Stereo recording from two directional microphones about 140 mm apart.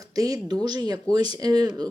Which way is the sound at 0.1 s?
25° right (ahead or behind).